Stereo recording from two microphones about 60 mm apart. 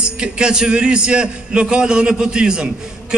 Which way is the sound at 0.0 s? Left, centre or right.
Centre.